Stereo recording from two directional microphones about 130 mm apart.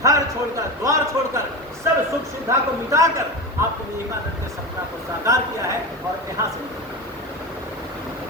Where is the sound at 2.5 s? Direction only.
25° right (ahead or behind).